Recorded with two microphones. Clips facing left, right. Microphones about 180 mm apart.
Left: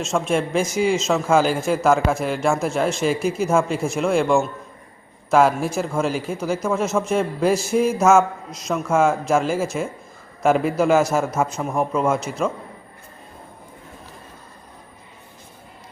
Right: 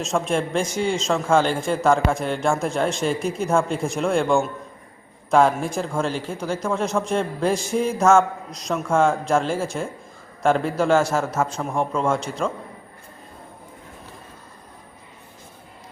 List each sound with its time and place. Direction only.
0.0 s a man's voice: centre (ahead or behind)